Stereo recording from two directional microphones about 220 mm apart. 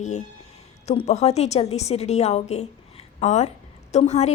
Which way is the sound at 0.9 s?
30° left (ahead or behind).